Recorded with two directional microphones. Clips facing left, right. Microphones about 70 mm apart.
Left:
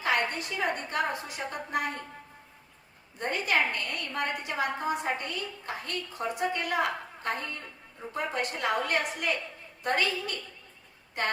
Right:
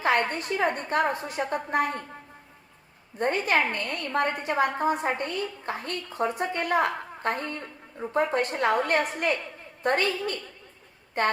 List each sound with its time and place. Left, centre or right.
0.0 s a woman's voice: right
3.2 s a woman's voice: right